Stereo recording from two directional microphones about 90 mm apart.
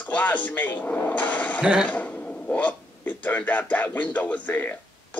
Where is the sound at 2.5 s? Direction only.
15° left (ahead or behind).